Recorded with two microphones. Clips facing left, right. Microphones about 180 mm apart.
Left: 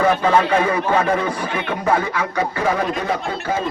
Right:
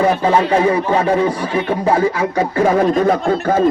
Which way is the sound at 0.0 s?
25° right (ahead or behind).